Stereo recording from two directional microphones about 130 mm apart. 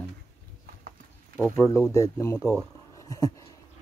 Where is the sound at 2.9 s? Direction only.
25° left (ahead or behind).